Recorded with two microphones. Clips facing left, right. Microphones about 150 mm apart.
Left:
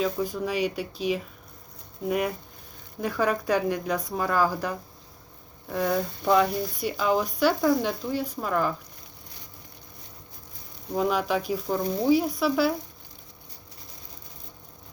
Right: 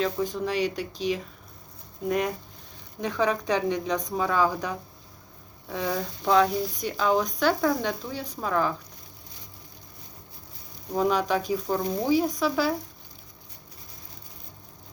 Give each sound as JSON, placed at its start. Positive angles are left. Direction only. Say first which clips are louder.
{"t": 0.0, "sound": "speech", "louder": "even", "side_deg": 10}
{"t": 2.0, "sound": "speech", "louder": "even", "side_deg": 5}
{"t": 10.9, "sound": "speech", "louder": "right 1 dB", "side_deg": 5}